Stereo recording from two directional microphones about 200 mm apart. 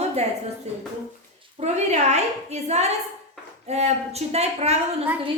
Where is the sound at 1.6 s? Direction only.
35° right (ahead or behind).